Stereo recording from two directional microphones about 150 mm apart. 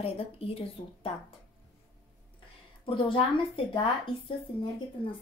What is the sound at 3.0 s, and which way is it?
Speech, 35° left (ahead or behind).